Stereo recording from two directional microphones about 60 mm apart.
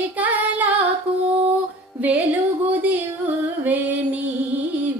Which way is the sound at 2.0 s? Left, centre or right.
Right.